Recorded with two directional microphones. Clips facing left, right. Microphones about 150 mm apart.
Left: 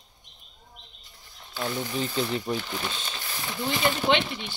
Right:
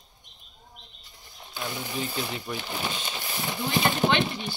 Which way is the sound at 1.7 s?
10° right (ahead or behind).